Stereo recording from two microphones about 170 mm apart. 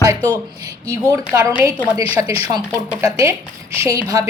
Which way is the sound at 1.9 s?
20° right (ahead or behind).